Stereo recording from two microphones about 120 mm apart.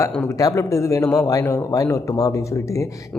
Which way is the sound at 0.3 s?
25° left (ahead or behind).